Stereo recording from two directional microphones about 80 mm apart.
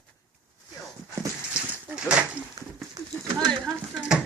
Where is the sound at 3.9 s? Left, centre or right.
Centre.